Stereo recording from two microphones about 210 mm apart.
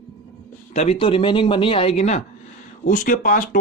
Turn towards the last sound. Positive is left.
turn(degrees=40)  # may be behind; listen again after turning